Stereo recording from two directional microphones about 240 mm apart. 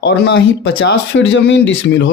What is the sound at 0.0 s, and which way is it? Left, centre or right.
Speech, left.